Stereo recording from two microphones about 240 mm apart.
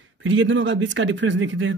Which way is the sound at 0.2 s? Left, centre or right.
Right.